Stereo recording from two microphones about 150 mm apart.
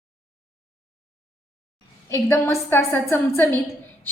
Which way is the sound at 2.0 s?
20° left (ahead or behind).